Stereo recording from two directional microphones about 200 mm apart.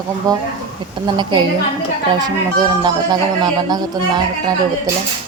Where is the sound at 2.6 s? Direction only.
20° right (ahead or behind).